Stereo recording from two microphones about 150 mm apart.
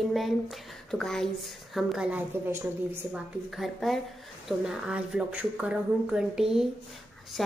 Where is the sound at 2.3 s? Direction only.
15° right (ahead or behind).